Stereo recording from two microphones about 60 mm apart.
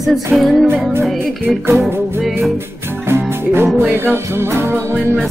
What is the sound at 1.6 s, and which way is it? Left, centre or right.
Music, right.